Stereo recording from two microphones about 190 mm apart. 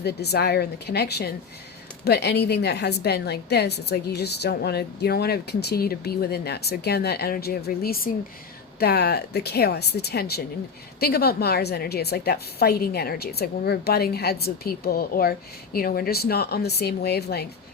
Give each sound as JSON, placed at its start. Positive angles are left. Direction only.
{"t": 0.0, "sound": "a woman's voice", "side_deg": 60}